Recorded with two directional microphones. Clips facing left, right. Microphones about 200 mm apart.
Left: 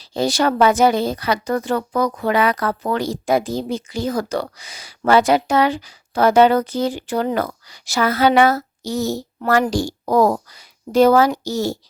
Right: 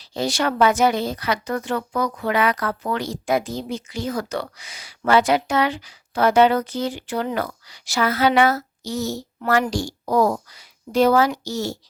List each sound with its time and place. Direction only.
0.0 s a woman's voice: 35° left (ahead or behind)